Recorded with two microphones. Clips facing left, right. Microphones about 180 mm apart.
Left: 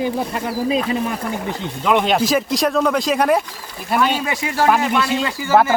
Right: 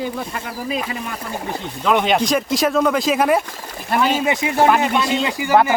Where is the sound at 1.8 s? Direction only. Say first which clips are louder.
Even; centre (ahead or behind).